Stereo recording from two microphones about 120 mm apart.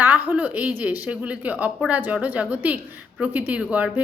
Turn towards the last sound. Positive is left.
turn(degrees=-10)  # may be behind; listen again after turning